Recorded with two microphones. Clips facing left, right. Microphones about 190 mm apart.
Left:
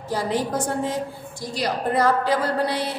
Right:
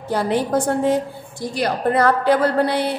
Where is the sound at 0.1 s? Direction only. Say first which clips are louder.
Right 5 dB; 60° right (ahead or behind).